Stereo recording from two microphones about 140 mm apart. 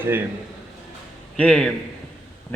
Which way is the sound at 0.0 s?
15° right (ahead or behind).